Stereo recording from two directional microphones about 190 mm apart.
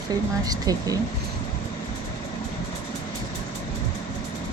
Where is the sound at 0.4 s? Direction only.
20° right (ahead or behind).